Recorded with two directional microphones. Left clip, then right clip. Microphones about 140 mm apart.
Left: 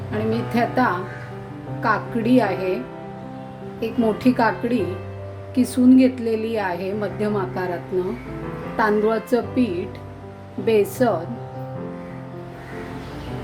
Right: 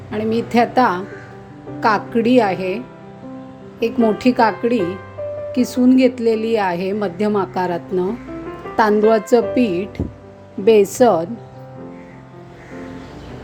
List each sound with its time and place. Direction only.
0.1 s a woman's voice: 60° right (ahead or behind)
3.8 s a woman's voice: 55° right (ahead or behind)